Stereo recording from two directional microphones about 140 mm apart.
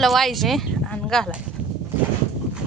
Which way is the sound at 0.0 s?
Centre (ahead or behind).